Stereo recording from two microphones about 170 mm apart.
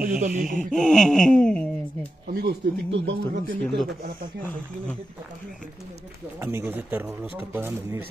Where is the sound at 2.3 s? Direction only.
70° right (ahead or behind).